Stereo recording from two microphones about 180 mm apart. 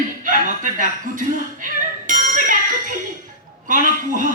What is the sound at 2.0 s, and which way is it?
Music, 45° right (ahead or behind).